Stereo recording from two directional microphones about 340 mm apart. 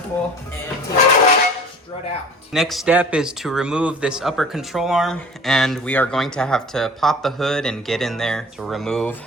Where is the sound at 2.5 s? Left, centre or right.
Centre.